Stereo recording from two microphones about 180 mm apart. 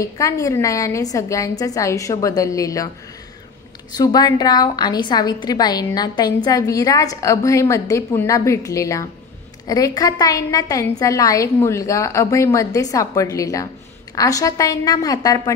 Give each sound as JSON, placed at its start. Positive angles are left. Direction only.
{"t": 0.0, "sound": "a woman's voice", "side_deg": 20}
{"t": 3.9, "sound": "a woman's voice", "side_deg": 20}